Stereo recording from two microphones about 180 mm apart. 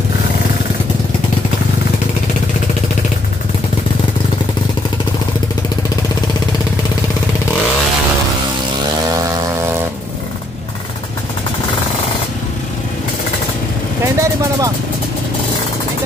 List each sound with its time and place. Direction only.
14.0 s vehicle: 15° right (ahead or behind)